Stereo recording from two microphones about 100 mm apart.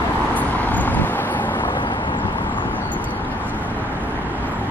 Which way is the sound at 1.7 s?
55° left (ahead or behind).